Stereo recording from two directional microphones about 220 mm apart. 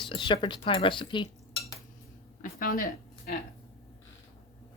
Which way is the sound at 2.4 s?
40° left (ahead or behind).